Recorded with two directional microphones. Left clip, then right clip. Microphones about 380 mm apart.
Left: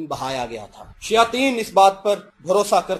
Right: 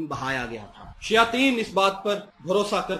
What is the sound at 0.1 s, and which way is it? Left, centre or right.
A man's voice, centre.